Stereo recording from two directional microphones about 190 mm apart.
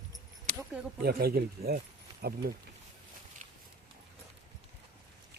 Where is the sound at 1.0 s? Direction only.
55° right (ahead or behind).